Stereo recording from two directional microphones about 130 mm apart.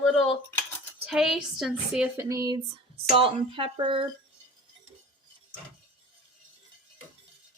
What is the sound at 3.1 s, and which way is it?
Speech, 45° right (ahead or behind).